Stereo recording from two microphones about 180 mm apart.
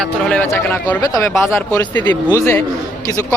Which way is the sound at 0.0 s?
5° left (ahead or behind).